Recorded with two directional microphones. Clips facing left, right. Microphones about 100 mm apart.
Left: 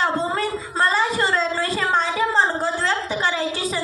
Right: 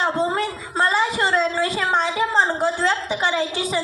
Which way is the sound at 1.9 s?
15° right (ahead or behind).